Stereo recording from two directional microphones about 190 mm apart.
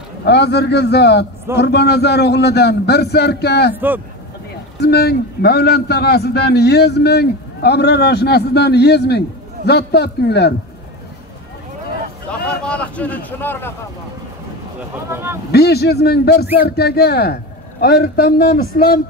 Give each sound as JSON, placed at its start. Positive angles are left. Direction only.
{"t": 0.2, "sound": "a man's voice", "side_deg": 60}
{"t": 3.7, "sound": "a man's voice", "side_deg": -10}
{"t": 4.7, "sound": "a man's voice", "side_deg": 60}
{"t": 12.4, "sound": "a sound", "side_deg": 5}
{"t": 15.0, "sound": "a man's voice", "side_deg": -15}
{"t": 15.5, "sound": "a man's voice", "side_deg": 60}